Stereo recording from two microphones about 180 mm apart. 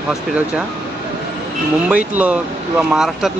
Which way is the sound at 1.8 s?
10° right (ahead or behind).